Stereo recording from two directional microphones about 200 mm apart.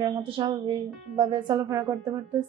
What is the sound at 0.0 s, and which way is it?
Speech, 20° right (ahead or behind).